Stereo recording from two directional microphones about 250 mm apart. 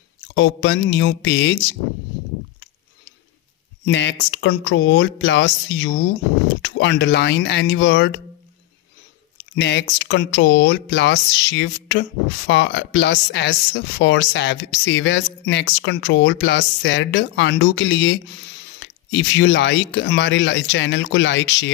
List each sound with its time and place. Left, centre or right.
0.3 s speech: left
3.8 s speech: left
9.6 s speech: left